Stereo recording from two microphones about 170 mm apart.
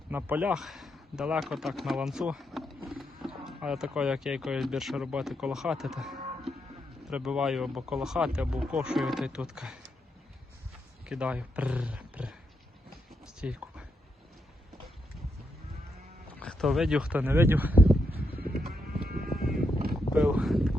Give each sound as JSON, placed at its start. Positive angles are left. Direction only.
{"t": 0.1, "sound": "speech", "side_deg": -10}
{"t": 11.1, "sound": "speech", "side_deg": -5}
{"t": 13.1, "sound": "a sound", "side_deg": -5}
{"t": 16.4, "sound": "speech", "side_deg": 5}
{"t": 18.4, "sound": "clip-clop", "side_deg": -60}
{"t": 19.3, "sound": "sheep", "side_deg": 0}
{"t": 20.1, "sound": "speech", "side_deg": -5}